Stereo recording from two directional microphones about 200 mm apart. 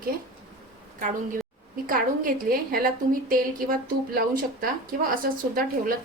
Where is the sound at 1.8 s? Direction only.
45° right (ahead or behind).